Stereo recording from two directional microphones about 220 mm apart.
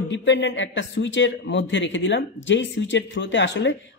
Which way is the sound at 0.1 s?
55° left (ahead or behind).